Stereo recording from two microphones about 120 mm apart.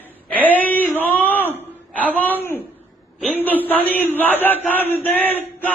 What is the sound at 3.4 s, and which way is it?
Speech, 15° left (ahead or behind).